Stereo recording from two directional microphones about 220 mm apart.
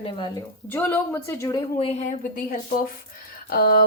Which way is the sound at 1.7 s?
30° left (ahead or behind).